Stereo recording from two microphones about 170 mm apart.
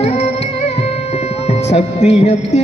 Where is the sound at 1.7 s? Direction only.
40° left (ahead or behind).